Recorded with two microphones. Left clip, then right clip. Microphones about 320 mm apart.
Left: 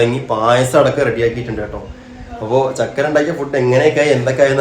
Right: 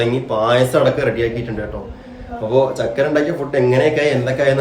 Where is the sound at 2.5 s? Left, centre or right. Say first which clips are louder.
Left 1 dB; centre.